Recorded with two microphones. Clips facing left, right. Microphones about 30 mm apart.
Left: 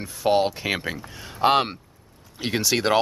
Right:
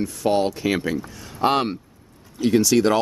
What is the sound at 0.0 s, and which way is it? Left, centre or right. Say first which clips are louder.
Speech: even; centre.